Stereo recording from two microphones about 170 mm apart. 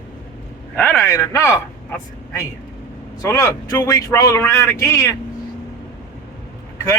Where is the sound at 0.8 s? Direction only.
10° left (ahead or behind).